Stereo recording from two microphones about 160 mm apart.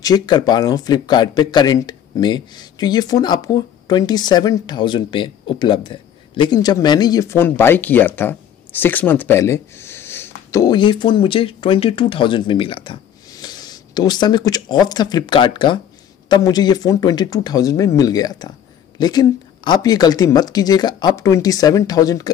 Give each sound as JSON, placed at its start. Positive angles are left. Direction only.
{"t": 0.0, "sound": "a man's voice", "side_deg": 25}